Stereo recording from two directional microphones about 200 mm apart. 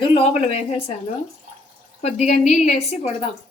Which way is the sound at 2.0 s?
35° left (ahead or behind).